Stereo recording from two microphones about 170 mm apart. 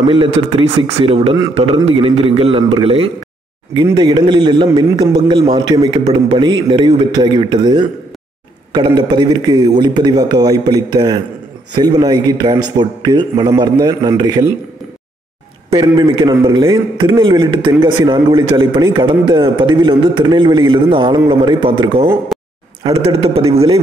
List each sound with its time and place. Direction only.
0.0 s a man's voice: 30° right (ahead or behind)
15.7 s a man's voice: 25° right (ahead or behind)
22.3 s a sound: centre (ahead or behind)
23.0 s a man's voice: 35° right (ahead or behind)